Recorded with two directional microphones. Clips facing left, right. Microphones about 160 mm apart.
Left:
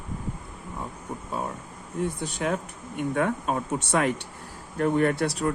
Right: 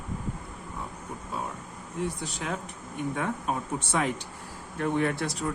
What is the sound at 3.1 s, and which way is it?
Speech, 65° left (ahead or behind).